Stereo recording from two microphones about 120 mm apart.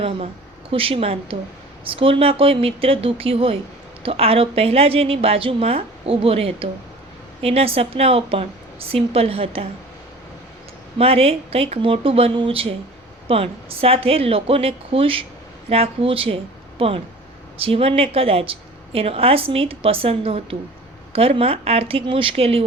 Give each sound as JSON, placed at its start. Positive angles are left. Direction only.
{"t": 0.7, "sound": "a woman's voice", "side_deg": -50}
{"t": 10.9, "sound": "a woman's voice", "side_deg": -55}